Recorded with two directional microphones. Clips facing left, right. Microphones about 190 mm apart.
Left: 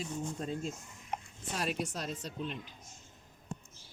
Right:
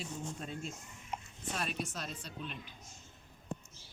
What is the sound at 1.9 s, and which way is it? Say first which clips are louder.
Speech: left 5 dB; 35° left (ahead or behind).